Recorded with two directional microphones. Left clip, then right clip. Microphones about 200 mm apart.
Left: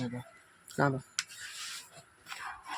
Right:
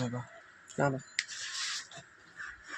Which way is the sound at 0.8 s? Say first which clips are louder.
Left 1 dB; 30° left (ahead or behind).